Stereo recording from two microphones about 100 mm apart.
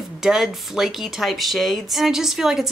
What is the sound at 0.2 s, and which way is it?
Speech, 5° right (ahead or behind).